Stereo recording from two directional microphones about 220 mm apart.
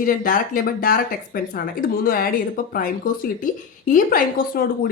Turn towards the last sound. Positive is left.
turn(degrees=40)  # may be behind; listen again after turning